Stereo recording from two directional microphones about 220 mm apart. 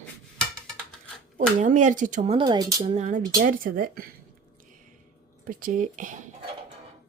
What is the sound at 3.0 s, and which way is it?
Speech, 35° right (ahead or behind).